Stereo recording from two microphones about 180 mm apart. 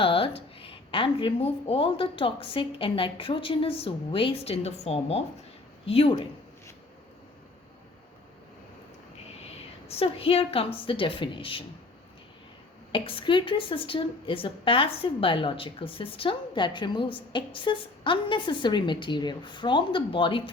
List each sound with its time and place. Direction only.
0.0 s speech: 30° left (ahead or behind)
9.9 s a woman's voice: 30° left (ahead or behind)
12.9 s a woman's voice: 30° left (ahead or behind)